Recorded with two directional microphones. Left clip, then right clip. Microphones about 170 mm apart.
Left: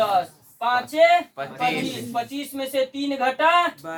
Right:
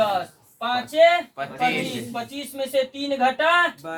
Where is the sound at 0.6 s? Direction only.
10° right (ahead or behind).